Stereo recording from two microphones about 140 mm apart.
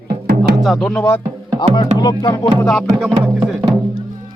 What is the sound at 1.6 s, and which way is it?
Speech, 30° left (ahead or behind).